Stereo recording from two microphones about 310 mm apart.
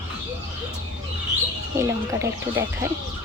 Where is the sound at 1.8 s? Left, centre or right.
Centre.